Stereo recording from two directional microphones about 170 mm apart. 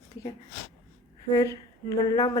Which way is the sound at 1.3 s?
20° left (ahead or behind).